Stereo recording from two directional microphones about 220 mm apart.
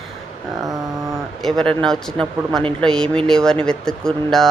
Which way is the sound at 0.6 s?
15° right (ahead or behind).